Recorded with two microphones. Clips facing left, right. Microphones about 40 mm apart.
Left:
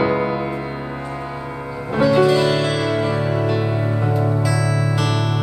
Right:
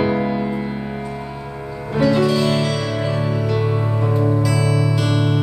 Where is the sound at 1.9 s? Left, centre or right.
Centre.